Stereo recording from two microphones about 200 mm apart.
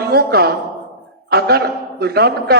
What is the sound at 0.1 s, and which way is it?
A man's voice, 50° right (ahead or behind).